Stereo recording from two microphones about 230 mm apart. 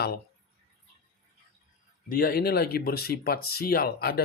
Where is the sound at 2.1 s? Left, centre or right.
Left.